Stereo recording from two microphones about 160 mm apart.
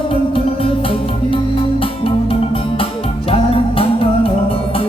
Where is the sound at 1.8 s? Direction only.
35° left (ahead or behind).